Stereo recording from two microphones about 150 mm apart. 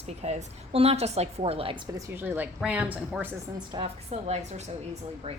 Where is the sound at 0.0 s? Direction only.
50° right (ahead or behind); by 2.0 s 30° right (ahead or behind).